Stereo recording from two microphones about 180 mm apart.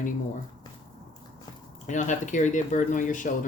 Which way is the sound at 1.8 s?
45° left (ahead or behind).